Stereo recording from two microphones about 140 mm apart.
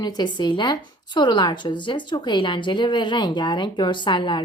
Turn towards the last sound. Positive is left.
turn(degrees=35)  # may be behind; listen again after turning